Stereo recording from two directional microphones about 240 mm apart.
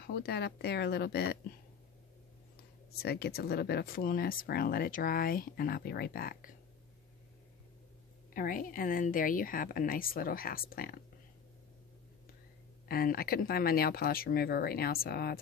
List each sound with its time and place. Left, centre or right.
0.0 s speech: left
3.0 s speech: left
8.3 s speech: left
12.8 s speech: left